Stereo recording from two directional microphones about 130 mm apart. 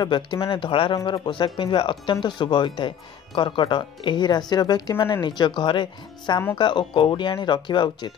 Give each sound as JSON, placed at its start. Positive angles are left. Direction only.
{"t": 0.0, "sound": "speech", "side_deg": 35}